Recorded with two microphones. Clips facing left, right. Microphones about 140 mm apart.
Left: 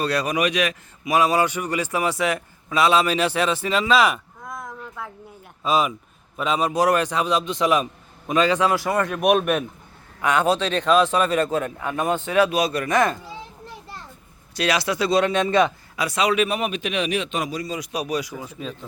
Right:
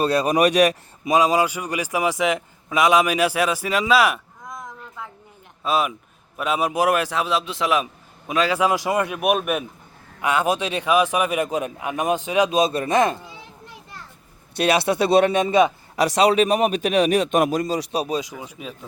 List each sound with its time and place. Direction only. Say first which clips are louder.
0.0 s speech: right 4 dB; 25° right (ahead or behind)
0.3 s speech: right 6 dB; 40° right (ahead or behind)
1.0 s a man's voice: right 1 dB; 15° right (ahead or behind)
5.6 s a man's voice: left 1 dB; 5° right (ahead or behind); by 13.1 s 20° right (ahead or behind)
14.8 s speech: right 4 dB; 60° right (ahead or behind)
15.3 s a man's voice: right 2 dB; 15° right (ahead or behind)
16.1 s speech: right 4 dB; 35° right (ahead or behind); by 17.7 s 55° right (ahead or behind)
17.7 s speech: right 3 dB; 30° right (ahead or behind); by 18.9 s 10° right (ahead or behind)